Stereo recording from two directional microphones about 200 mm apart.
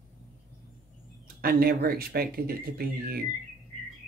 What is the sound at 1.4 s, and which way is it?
Speech, 50° right (ahead or behind).